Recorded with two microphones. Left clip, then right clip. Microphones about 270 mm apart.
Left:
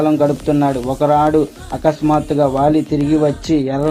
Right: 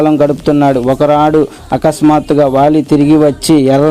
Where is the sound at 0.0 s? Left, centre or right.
Right.